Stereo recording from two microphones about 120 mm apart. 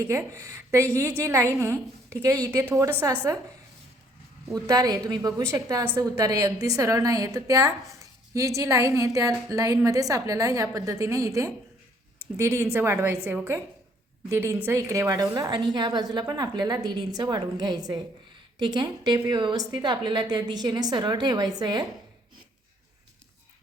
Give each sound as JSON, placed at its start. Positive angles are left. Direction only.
{"t": 0.0, "sound": "a woman's voice", "side_deg": -25}
{"t": 4.4, "sound": "a woman's voice", "side_deg": -30}